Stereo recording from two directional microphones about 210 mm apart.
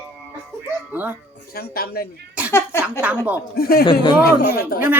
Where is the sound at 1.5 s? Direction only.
45° left (ahead or behind).